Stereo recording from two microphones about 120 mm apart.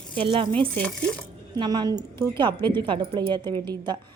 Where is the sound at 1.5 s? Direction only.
35° right (ahead or behind).